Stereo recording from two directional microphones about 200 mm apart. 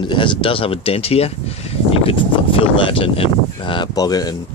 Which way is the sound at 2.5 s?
25° left (ahead or behind).